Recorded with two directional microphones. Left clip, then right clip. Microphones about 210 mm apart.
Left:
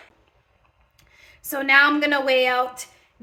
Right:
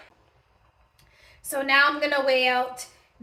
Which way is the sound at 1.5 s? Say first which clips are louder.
Left 4 dB; 45° left (ahead or behind).